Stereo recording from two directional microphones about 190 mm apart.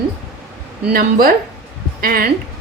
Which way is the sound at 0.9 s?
50° right (ahead or behind).